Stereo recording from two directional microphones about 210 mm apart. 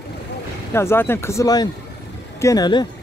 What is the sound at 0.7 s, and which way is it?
Speech, 10° left (ahead or behind).